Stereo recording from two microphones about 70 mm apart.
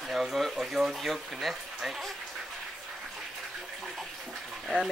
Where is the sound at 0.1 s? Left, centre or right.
Centre.